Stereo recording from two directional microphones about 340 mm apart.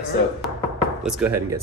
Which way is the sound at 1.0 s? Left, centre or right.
Centre.